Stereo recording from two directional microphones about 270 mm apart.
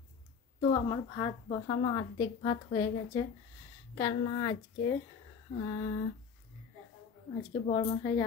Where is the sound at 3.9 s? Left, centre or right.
Centre.